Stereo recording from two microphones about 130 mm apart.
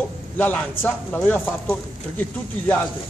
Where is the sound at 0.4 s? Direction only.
10° left (ahead or behind).